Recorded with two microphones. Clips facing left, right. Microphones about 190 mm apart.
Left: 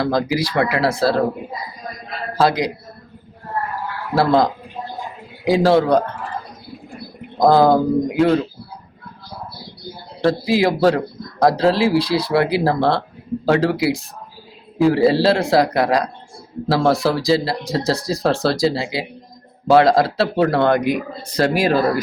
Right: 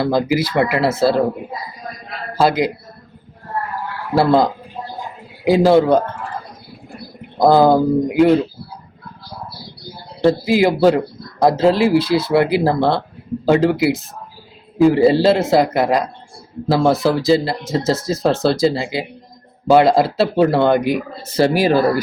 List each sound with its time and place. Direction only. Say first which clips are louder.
0.0 s speech: right 2 dB; 5° right (ahead or behind)
2.4 s speech: right 2 dB; centre (ahead or behind)
4.1 s speech: right 2 dB; centre (ahead or behind)
7.3 s speech: right 1 dB; centre (ahead or behind)
10.2 s speech: right 3 dB; centre (ahead or behind)